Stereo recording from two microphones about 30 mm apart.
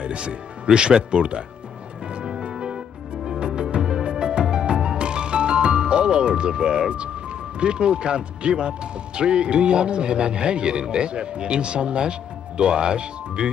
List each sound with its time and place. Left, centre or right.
0.0 s speech: right
2.2 s music: right
4.5 s speech: right